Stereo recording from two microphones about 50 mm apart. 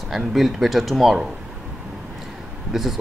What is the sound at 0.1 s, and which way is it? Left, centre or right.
Speech, centre.